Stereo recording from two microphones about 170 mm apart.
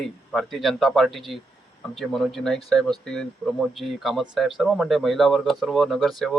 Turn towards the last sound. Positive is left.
turn(degrees=0)  # may be behind; listen again after turning